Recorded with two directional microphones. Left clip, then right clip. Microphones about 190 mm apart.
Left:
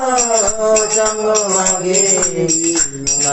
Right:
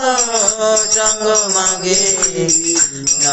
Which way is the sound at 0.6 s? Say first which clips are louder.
Even; 5° left (ahead or behind).